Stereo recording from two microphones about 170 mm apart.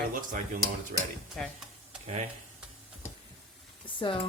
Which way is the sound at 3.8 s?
30° left (ahead or behind).